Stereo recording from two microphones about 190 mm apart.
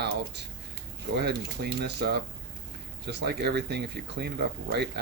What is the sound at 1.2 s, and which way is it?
Speech, 60° right (ahead or behind).